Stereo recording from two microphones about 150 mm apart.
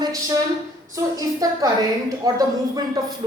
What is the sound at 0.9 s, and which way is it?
A woman's voice, 25° right (ahead or behind).